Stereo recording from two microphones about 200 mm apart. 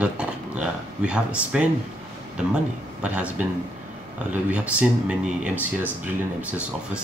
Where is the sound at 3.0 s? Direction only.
5° right (ahead or behind).